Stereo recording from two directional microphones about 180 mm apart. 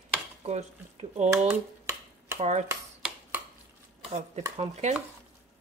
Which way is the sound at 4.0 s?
35° right (ahead or behind).